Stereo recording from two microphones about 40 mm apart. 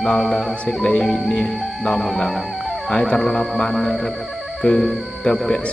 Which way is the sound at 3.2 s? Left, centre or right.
Centre.